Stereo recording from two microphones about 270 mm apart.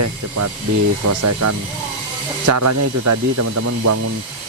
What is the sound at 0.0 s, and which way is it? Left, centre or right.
Speech, right.